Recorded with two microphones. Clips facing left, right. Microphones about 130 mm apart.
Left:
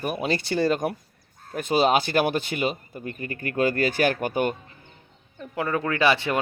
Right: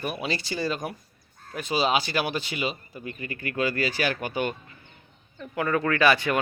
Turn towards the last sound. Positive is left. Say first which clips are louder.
# even
turn(degrees=25)  # may be behind; listen again after turning